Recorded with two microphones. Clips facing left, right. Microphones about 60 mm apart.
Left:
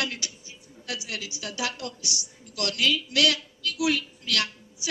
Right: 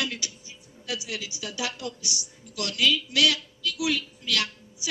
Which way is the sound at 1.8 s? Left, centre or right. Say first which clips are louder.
Even; right.